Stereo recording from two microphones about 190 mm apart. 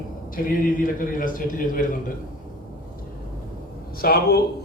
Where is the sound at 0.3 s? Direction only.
50° left (ahead or behind).